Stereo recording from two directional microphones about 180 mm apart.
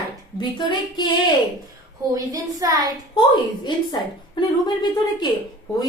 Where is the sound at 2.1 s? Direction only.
20° right (ahead or behind).